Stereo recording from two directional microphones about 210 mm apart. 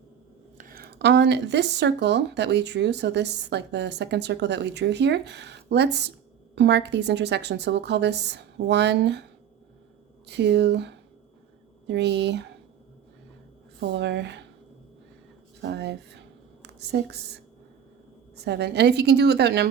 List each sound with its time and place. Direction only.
0.5 s speech: 40° right (ahead or behind)
10.2 s speech: 55° right (ahead or behind)
13.7 s speech: 55° right (ahead or behind)
15.6 s a woman's voice: 55° right (ahead or behind)
18.4 s a woman's voice: 55° right (ahead or behind)